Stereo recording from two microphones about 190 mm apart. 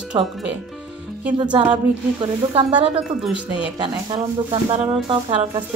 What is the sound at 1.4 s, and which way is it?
Speech, 25° right (ahead or behind).